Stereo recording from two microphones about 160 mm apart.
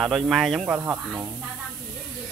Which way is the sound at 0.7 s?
15° right (ahead or behind).